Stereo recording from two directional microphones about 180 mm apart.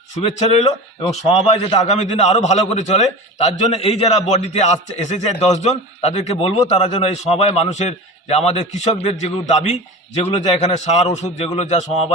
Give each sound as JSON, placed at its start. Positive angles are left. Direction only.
{"t": 0.2, "sound": "a man's voice", "side_deg": 35}